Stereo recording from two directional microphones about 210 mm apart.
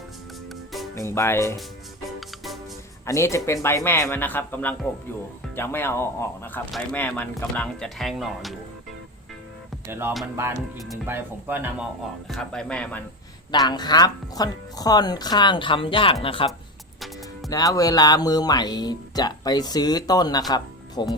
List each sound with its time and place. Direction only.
0.9 s speech: 15° left (ahead or behind)
3.1 s speech: 15° left (ahead or behind)
9.8 s speech: 10° right (ahead or behind)
10.8 s speech: centre (ahead or behind)
12.3 s speech: centre (ahead or behind)
13.5 s speech: 20° left (ahead or behind)
17.5 s speech: 15° left (ahead or behind)